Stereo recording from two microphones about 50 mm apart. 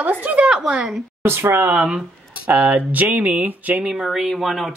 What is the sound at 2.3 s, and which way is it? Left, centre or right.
Speech, right.